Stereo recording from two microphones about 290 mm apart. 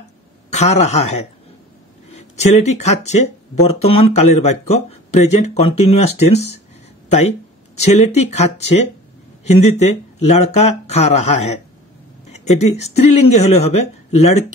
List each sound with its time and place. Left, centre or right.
0.5 s speech: left
9.4 s speech: left